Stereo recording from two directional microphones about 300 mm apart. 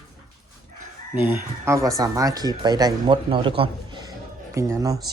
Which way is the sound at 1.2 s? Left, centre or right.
Centre.